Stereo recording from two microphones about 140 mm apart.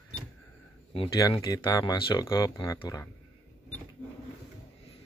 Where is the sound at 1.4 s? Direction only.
30° left (ahead or behind).